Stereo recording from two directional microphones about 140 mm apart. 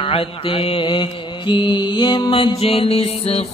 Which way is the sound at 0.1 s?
40° left (ahead or behind).